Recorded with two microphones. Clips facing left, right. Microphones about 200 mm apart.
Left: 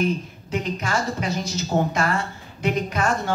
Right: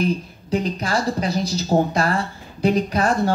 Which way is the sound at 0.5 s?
35° right (ahead or behind).